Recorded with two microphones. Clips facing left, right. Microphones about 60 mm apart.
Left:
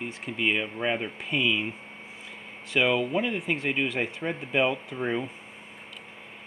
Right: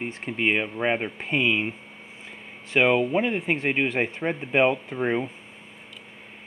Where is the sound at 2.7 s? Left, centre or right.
Right.